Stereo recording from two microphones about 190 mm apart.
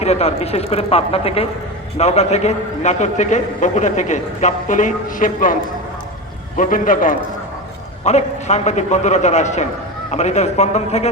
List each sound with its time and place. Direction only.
0.0 s a man's voice: 35° left (ahead or behind)
6.6 s a man's voice: 45° left (ahead or behind)